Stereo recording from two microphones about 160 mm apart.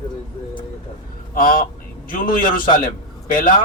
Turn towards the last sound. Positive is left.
turn(degrees=60)  # may be behind; listen again after turning